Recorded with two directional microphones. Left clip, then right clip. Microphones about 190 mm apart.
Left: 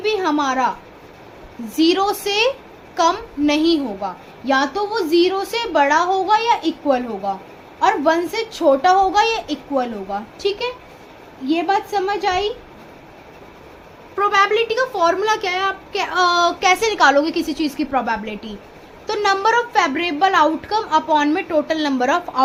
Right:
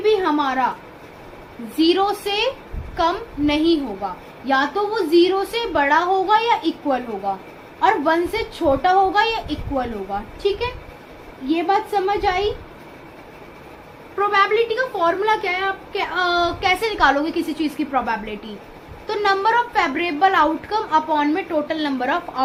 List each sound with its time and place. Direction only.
0.0 s speech: 45° left (ahead or behind)
1.7 s a woman's voice: 55° left (ahead or behind)
14.2 s a woman's voice: 55° left (ahead or behind)
19.0 s a woman's voice: 55° left (ahead or behind)